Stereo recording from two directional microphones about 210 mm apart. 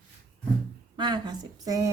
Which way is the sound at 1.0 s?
20° right (ahead or behind).